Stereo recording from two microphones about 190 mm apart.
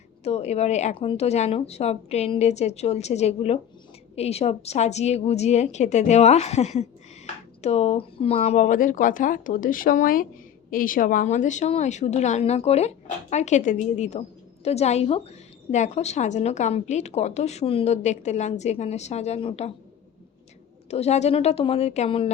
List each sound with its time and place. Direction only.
0.3 s a woman's voice: 35° left (ahead or behind)
20.9 s a woman's voice: 35° left (ahead or behind)